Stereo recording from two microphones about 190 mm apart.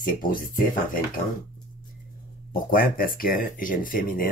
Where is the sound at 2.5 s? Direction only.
50° left (ahead or behind).